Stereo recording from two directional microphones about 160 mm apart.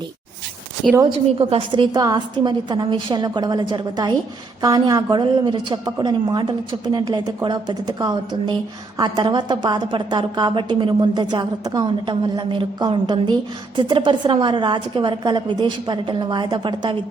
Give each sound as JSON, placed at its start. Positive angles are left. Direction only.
{"t": 1.4, "sound": "a woman's voice", "side_deg": -35}